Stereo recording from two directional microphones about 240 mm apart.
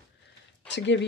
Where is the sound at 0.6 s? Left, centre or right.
Left.